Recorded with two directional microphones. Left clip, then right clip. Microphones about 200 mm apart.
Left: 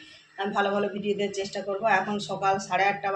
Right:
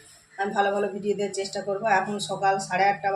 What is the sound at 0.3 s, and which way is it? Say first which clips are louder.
A woman's voice: right 2 dB; 15° right (ahead or behind).